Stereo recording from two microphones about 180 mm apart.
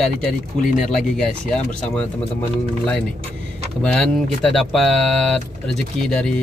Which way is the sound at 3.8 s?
5° left (ahead or behind).